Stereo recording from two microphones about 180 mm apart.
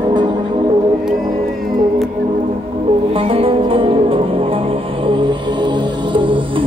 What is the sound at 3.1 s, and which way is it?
Music, 30° right (ahead or behind).